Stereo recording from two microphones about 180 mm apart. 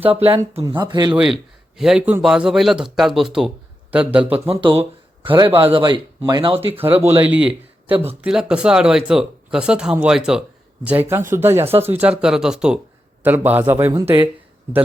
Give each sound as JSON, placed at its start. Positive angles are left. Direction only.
{"t": 0.1, "sound": "speech", "side_deg": -30}
{"t": 1.1, "sound": "speech", "side_deg": -5}
{"t": 4.6, "sound": "a sound", "side_deg": -30}
{"t": 5.5, "sound": "speech", "side_deg": -30}
{"t": 6.8, "sound": "speech", "side_deg": -10}